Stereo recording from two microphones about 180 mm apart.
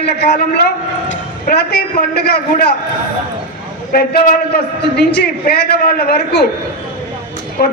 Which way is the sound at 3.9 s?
60° left (ahead or behind).